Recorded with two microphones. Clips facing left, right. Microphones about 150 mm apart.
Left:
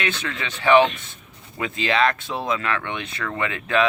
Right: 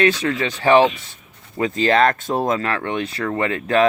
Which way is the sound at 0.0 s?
40° right (ahead or behind).